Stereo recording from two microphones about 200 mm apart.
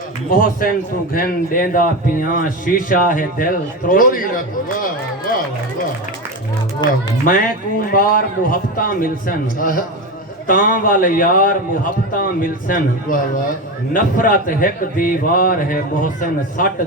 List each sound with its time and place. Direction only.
1.1 s a man's voice: 45° left (ahead or behind)
6.8 s speech: 20° left (ahead or behind)
7.3 s a man's voice: 45° left (ahead or behind)